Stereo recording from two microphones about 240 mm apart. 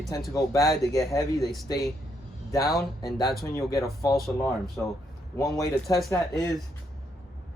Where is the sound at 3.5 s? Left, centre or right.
Centre.